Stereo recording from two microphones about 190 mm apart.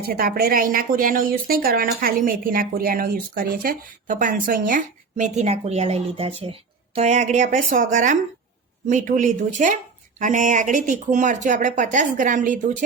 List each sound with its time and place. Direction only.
0.1 s speech: 50° right (ahead or behind)